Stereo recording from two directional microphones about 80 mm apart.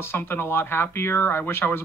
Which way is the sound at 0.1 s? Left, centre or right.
Left.